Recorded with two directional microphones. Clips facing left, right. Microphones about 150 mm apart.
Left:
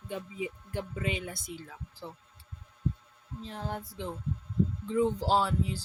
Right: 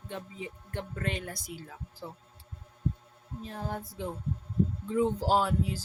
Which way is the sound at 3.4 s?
10° right (ahead or behind).